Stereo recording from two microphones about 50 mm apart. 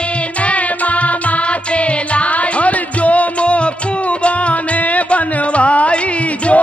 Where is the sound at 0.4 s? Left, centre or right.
Left.